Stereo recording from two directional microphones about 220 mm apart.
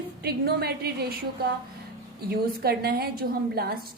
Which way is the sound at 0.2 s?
45° right (ahead or behind).